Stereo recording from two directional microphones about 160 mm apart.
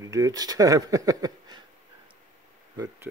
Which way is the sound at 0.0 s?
20° right (ahead or behind).